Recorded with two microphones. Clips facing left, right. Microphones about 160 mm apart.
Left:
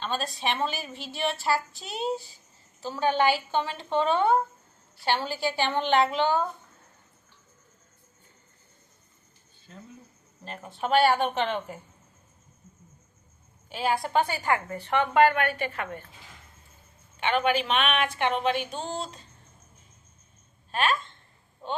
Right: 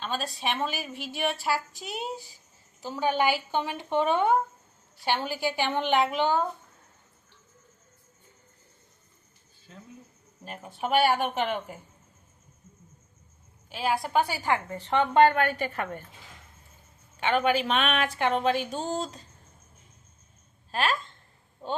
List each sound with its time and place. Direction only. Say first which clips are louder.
0.0 s a woman's voice: left 1 dB; 5° right (ahead or behind)
10.4 s a woman's voice: left 1 dB; 10° right (ahead or behind)
13.7 s a woman's voice: left 1 dB; centre (ahead or behind)
14.5 s a woman's voice: even; 25° right (ahead or behind); by 16.0 s 40° right (ahead or behind)
17.2 s speech: even; 40° right (ahead or behind)
20.7 s a woman's voice: left 1 dB; 30° right (ahead or behind)